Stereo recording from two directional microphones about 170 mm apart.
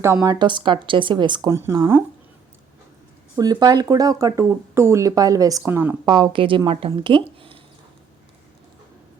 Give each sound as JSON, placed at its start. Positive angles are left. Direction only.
{"t": 0.0, "sound": "speech", "side_deg": -20}
{"t": 3.3, "sound": "speech", "side_deg": -25}
{"t": 6.1, "sound": "a woman's voice", "side_deg": -25}
{"t": 6.9, "sound": "a sound", "side_deg": -30}